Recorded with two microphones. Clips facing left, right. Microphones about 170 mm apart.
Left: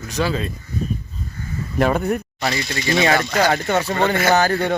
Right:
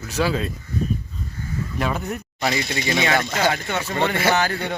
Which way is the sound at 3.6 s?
40° left (ahead or behind).